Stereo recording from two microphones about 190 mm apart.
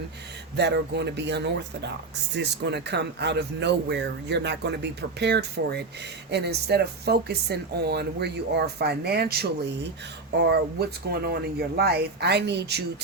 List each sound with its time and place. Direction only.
0.5 s speech: 60° right (ahead or behind)